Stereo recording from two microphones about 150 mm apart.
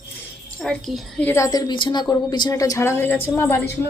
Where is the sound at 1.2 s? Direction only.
20° left (ahead or behind).